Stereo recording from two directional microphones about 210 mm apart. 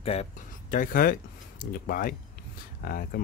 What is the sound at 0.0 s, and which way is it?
Speech, 30° left (ahead or behind).